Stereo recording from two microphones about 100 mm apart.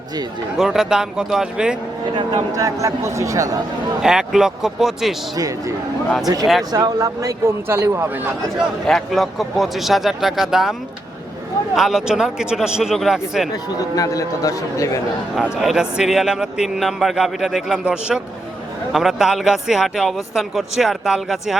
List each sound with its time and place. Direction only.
0.5 s speech: 5° right (ahead or behind)
2.1 s a man's voice: 40° right (ahead or behind)
4.0 s a man's voice: 5° right (ahead or behind)
5.4 s a man's voice: 35° right (ahead or behind)
8.9 s a man's voice: centre (ahead or behind)
13.7 s a man's voice: 35° left (ahead or behind)
15.4 s a man's voice: 5° right (ahead or behind)